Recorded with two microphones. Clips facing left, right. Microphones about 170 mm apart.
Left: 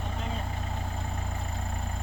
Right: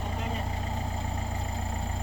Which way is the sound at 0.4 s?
35° right (ahead or behind).